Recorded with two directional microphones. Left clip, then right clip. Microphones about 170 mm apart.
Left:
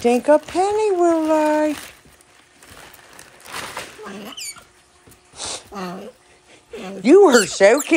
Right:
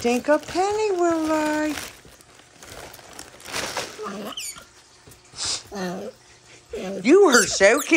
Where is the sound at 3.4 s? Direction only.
65° right (ahead or behind).